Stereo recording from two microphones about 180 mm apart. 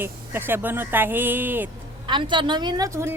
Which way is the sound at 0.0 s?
10° right (ahead or behind).